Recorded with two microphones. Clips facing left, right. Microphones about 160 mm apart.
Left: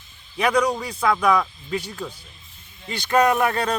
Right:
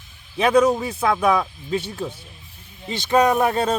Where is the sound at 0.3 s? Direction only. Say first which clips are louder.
Right 4 dB; 25° right (ahead or behind).